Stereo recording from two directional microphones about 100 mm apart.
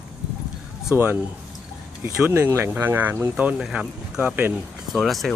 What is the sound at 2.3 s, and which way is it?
Speech, 25° right (ahead or behind).